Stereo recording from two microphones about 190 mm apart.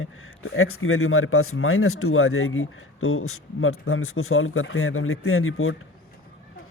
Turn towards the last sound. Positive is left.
turn(degrees=90)